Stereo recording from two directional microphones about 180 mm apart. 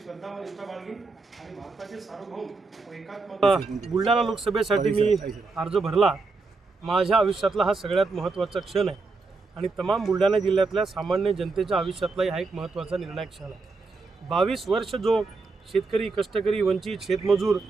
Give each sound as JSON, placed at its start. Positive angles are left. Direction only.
{"t": 0.0, "sound": "speech", "side_deg": 0}
{"t": 4.8, "sound": "a man's voice", "side_deg": -35}
{"t": 5.5, "sound": "speech", "side_deg": 0}